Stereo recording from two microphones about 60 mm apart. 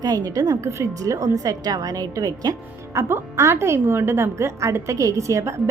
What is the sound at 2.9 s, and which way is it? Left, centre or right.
A woman's voice, right.